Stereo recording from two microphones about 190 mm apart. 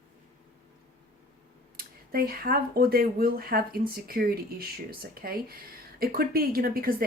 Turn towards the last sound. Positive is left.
turn(degrees=-50)  # may be behind; listen again after turning